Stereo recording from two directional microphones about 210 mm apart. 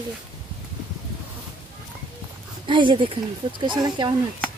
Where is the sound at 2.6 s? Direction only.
25° right (ahead or behind).